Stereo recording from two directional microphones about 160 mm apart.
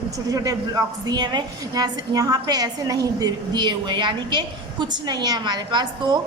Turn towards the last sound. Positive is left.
turn(degrees=-25)  # may be behind; listen again after turning